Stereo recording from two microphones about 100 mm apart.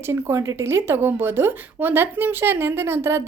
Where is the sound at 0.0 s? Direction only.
25° right (ahead or behind).